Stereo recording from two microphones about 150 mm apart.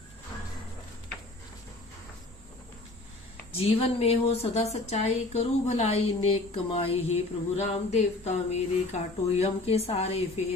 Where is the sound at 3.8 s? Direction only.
40° left (ahead or behind).